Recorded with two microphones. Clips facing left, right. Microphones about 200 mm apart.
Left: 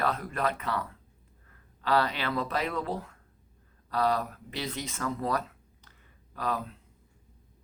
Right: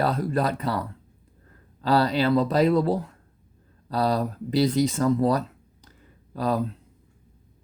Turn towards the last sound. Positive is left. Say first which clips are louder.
# right 8 dB
turn(degrees=-35)  # may be behind; listen again after turning